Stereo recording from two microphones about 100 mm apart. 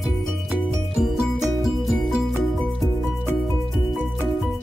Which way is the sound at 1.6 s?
Centre (ahead or behind).